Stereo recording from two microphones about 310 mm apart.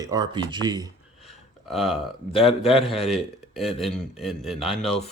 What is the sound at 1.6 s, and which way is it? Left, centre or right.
Speech, centre.